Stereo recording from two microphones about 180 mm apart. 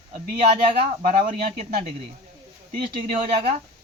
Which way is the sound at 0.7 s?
50° right (ahead or behind).